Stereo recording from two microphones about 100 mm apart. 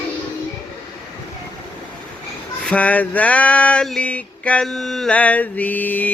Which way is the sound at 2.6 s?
15° left (ahead or behind).